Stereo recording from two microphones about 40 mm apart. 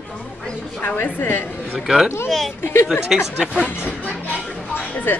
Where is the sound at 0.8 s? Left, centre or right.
Left.